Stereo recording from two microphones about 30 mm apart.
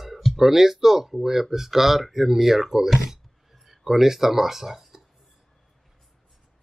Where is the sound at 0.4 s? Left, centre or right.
Centre.